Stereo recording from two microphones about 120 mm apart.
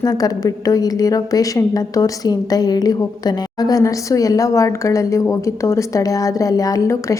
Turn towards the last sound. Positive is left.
turn(degrees=25)  # may be behind; listen again after turning